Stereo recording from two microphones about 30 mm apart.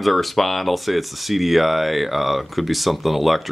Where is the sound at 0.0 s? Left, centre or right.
Centre.